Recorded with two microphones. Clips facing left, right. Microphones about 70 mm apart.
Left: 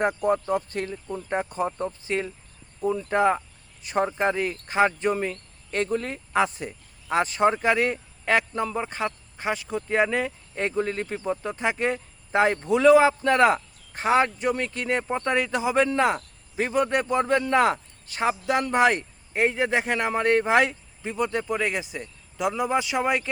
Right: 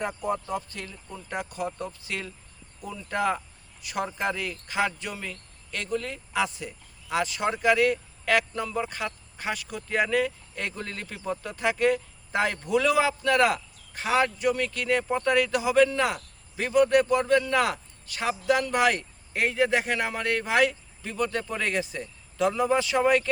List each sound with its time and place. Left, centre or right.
0.0 s speech: left; by 23.3 s centre